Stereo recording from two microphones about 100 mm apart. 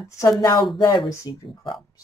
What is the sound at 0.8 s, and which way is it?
Speech, 45° left (ahead or behind).